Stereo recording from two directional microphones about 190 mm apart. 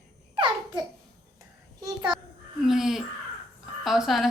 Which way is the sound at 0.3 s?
25° right (ahead or behind).